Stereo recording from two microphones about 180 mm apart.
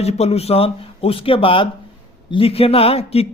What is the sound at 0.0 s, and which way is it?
Speech, 35° left (ahead or behind).